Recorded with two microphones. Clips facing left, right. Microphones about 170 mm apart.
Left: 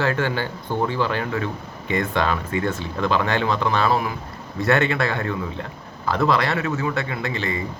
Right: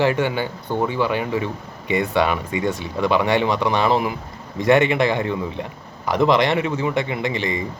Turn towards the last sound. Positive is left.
turn(degrees=-20)  # may be behind; listen again after turning